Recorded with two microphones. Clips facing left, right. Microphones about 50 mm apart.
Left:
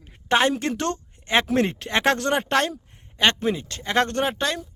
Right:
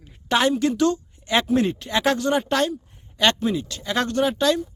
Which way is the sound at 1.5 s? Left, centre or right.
Left.